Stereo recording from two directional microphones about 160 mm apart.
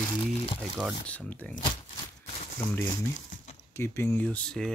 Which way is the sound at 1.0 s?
10° left (ahead or behind).